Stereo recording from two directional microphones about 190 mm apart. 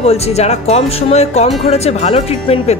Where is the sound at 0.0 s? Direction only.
35° left (ahead or behind).